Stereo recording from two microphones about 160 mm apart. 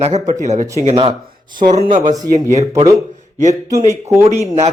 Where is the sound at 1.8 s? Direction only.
55° right (ahead or behind).